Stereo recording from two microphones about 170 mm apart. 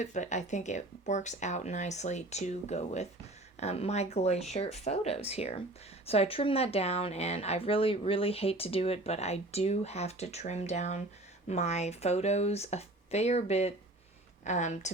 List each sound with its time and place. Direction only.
0.0 s speech: 45° left (ahead or behind)